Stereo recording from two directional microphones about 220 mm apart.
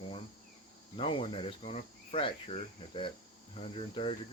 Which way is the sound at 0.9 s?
25° left (ahead or behind).